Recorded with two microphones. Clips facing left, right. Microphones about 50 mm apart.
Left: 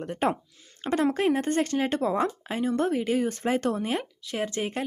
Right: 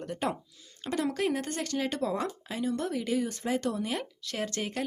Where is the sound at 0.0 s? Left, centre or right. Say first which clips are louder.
Left 5 dB; left.